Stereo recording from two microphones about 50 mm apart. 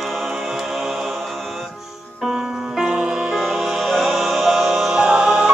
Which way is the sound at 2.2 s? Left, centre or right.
Centre.